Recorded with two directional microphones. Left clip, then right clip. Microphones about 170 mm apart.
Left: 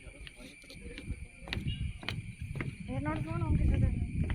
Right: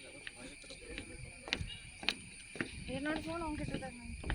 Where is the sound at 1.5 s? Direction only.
50° left (ahead or behind).